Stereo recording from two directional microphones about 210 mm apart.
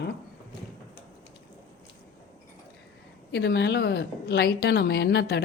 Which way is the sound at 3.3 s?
50° left (ahead or behind).